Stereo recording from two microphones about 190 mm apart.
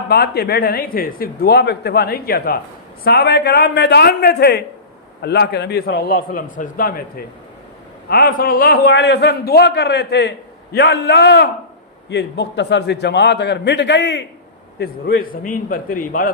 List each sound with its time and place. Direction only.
0.1 s a man's voice: 60° left (ahead or behind)
8.1 s a man's voice: 50° left (ahead or behind); by 14.3 s 65° left (ahead or behind)
14.8 s speech: 55° left (ahead or behind)